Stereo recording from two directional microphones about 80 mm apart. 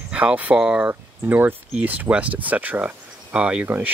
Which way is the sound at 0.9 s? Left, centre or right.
Right.